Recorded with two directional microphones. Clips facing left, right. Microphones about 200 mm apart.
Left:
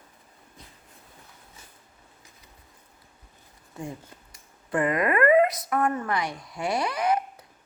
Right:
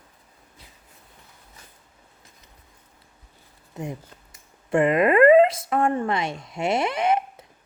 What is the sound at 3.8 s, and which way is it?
Speech, 20° right (ahead or behind).